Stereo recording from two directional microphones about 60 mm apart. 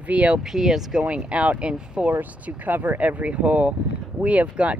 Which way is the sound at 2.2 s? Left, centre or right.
Right.